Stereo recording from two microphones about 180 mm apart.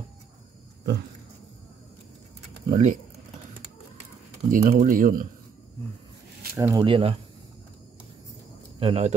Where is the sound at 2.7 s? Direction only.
40° right (ahead or behind).